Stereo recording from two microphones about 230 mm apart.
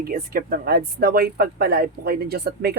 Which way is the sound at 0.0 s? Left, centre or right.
Right.